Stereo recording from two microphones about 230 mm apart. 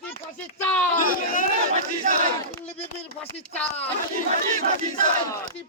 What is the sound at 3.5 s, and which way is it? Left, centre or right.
Speech, centre.